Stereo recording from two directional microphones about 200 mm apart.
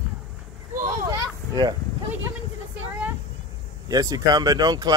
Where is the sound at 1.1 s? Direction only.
20° right (ahead or behind).